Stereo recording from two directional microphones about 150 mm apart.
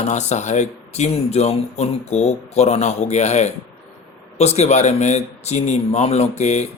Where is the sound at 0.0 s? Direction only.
50° left (ahead or behind).